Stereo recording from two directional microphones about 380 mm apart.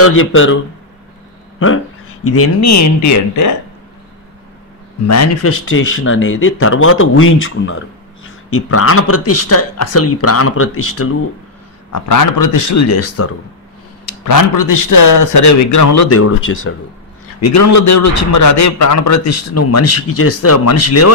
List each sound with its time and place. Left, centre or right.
0.0 s speech: left
2.2 s a man's voice: left
5.0 s speech: left
11.9 s a man's voice: left
14.2 s a man's voice: left
17.4 s a man's voice: left